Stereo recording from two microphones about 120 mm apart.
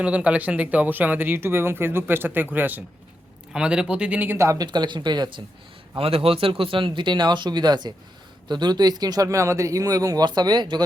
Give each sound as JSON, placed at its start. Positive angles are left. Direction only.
{"t": 0.0, "sound": "speech", "side_deg": -10}
{"t": 6.0, "sound": "speech", "side_deg": -55}